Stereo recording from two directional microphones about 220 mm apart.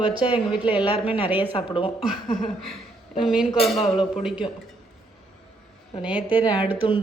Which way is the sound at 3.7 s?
30° left (ahead or behind).